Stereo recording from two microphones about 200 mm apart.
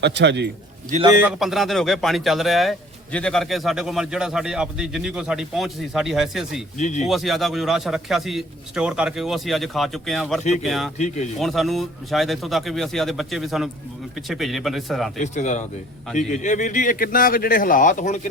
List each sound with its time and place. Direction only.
0.0 s a man's voice: 60° right (ahead or behind)
1.2 s a man's voice: centre (ahead or behind)
6.7 s speech: 35° left (ahead or behind)
7.0 s a man's voice: centre (ahead or behind)
10.9 s speech: 35° left (ahead or behind)
11.3 s a man's voice: centre (ahead or behind)
15.2 s speech: 35° left (ahead or behind)